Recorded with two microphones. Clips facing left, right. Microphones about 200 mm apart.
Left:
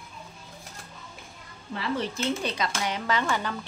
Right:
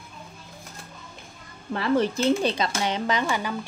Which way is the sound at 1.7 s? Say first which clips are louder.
Right 7 dB; 50° right (ahead or behind).